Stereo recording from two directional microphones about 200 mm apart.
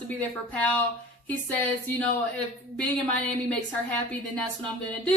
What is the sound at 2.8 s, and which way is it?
A woman's voice, 5° left (ahead or behind).